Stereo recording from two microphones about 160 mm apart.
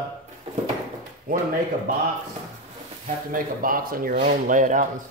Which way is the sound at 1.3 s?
60° right (ahead or behind).